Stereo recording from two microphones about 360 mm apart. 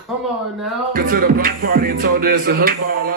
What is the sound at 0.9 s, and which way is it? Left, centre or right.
Music, right.